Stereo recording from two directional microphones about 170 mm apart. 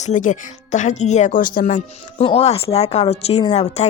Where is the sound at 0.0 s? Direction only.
45° left (ahead or behind).